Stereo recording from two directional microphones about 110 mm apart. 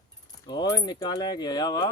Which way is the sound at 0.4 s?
40° left (ahead or behind).